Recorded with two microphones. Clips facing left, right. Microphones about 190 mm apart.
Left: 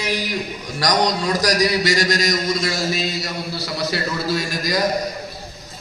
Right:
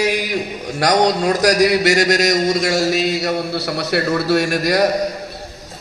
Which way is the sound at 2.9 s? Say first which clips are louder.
Right 7 dB; 70° right (ahead or behind).